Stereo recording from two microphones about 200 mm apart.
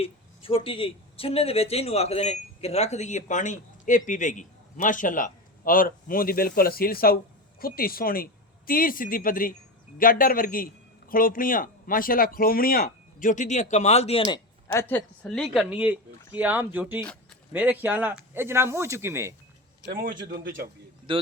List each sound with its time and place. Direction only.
0.0 s speech: 25° left (ahead or behind)
14.3 s speech: 15° left (ahead or behind); by 19.3 s 10° right (ahead or behind)
19.9 s a man's voice: 60° right (ahead or behind)
21.1 s a man's voice: 25° right (ahead or behind)